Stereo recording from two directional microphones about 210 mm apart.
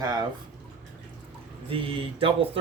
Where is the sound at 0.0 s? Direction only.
20° right (ahead or behind).